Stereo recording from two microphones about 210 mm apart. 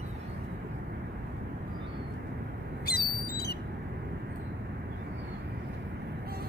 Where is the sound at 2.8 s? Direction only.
45° left (ahead or behind).